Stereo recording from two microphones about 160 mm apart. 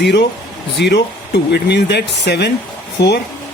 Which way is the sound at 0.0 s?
90° left.